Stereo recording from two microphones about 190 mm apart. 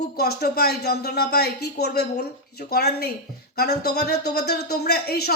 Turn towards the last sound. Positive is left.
turn(degrees=55)  # may be behind; listen again after turning